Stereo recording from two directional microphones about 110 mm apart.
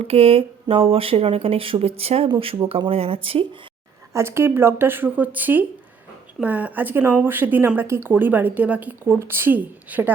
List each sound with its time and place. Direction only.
0.0 s speech: 60° right (ahead or behind)
4.1 s a woman's voice: 25° right (ahead or behind)